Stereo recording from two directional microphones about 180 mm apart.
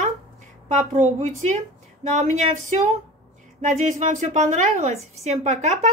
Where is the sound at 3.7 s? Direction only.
40° right (ahead or behind).